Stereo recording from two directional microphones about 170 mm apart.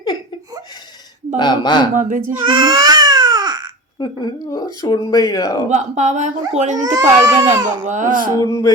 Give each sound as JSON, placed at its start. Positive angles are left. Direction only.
{"t": 1.4, "sound": "speech", "side_deg": 25}
{"t": 2.0, "sound": "speech", "side_deg": -50}
{"t": 2.4, "sound": "baby cry", "side_deg": -30}
{"t": 4.0, "sound": "speech", "side_deg": 25}
{"t": 5.6, "sound": "speech", "side_deg": -45}
{"t": 6.8, "sound": "a child's voice", "side_deg": -20}
{"t": 7.9, "sound": "speech", "side_deg": -50}
{"t": 8.4, "sound": "speech", "side_deg": 20}